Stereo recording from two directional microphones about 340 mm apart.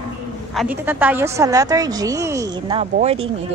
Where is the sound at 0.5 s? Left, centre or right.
Centre.